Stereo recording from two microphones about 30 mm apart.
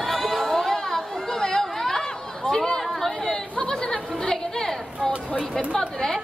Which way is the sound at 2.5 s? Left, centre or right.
Centre.